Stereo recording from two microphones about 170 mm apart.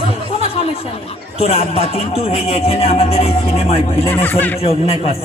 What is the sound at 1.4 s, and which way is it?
A man's voice, 35° left (ahead or behind).